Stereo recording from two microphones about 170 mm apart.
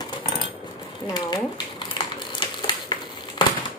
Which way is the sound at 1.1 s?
25° left (ahead or behind).